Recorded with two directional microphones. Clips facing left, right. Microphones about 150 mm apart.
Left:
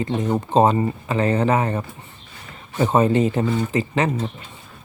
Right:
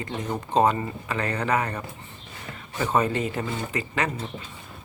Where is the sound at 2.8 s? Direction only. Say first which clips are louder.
Left 7 dB; 25° left (ahead or behind).